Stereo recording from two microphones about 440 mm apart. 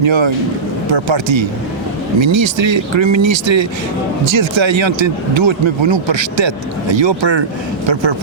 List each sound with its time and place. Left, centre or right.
0.0 s speech: right